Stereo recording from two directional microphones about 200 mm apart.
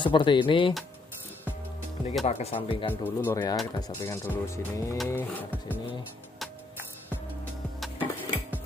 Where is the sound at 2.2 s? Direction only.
30° left (ahead or behind).